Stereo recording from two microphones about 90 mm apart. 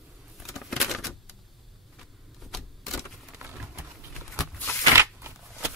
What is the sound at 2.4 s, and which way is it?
Power windows, centre (ahead or behind).